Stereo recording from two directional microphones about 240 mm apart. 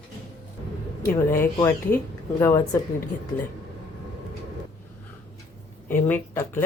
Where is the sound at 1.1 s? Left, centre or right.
Centre.